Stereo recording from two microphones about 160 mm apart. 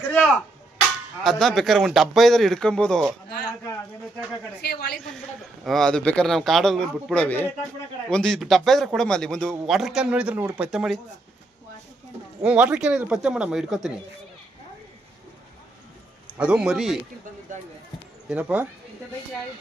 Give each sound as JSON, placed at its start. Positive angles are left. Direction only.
{"t": 1.2, "sound": "a man's voice", "side_deg": 5}
{"t": 4.6, "sound": "a woman's voice", "side_deg": 90}
{"t": 5.6, "sound": "a man's voice", "side_deg": 5}
{"t": 12.4, "sound": "a man's voice", "side_deg": -5}
{"t": 16.4, "sound": "a man's voice", "side_deg": -5}
{"t": 18.3, "sound": "speech", "side_deg": -10}